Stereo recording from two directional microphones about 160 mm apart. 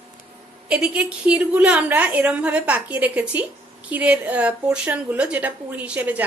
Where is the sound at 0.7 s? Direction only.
5° right (ahead or behind).